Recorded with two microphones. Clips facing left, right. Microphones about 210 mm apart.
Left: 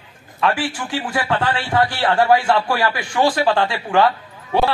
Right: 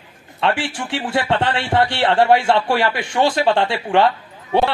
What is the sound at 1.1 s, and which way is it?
Speech, 25° right (ahead or behind).